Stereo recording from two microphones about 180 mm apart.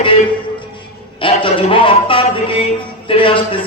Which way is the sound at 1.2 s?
30° left (ahead or behind).